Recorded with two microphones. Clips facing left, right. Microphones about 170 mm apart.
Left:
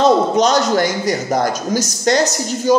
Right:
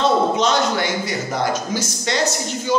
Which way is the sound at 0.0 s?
40° left (ahead or behind).